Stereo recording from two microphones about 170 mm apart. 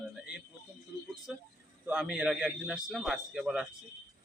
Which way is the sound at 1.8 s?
5° right (ahead or behind).